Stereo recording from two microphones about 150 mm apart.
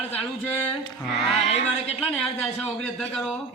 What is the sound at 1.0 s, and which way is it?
Speech, centre (ahead or behind).